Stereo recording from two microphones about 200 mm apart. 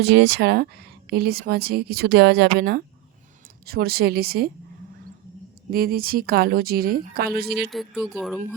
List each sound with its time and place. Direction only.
0.0 s speech: 55° right (ahead or behind)
5.7 s speech: 50° right (ahead or behind)
7.7 s speech: centre (ahead or behind)